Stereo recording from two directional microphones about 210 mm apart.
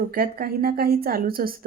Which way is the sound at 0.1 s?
45° right (ahead or behind).